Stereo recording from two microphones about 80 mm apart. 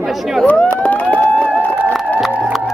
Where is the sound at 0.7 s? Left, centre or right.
Centre.